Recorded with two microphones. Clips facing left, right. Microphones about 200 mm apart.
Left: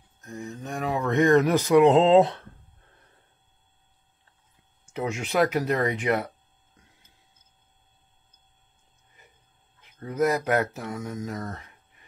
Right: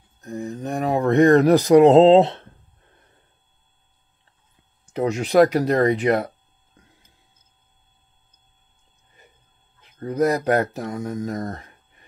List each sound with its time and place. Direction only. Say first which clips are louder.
0.2 s speech: right 7 dB; 35° right (ahead or behind)
4.9 s speech: right 8 dB; 35° right (ahead or behind)
9.9 s speech: right 4 dB; 35° right (ahead or behind)